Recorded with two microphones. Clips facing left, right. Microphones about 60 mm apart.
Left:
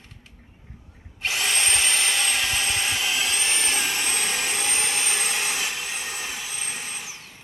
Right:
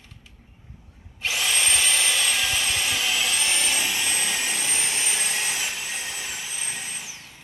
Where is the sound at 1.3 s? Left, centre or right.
Left.